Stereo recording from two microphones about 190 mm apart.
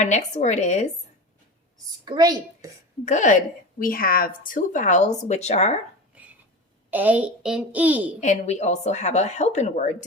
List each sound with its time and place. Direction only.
0.0 s speech: 40° left (ahead or behind)
2.0 s a child's voice: 20° right (ahead or behind)
3.0 s speech: 40° left (ahead or behind)
6.1 s a sound: 5° right (ahead or behind)
6.9 s a child's voice: 10° right (ahead or behind)
8.2 s speech: 40° left (ahead or behind)